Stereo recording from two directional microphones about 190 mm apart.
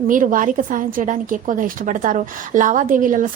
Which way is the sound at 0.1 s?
45° right (ahead or behind).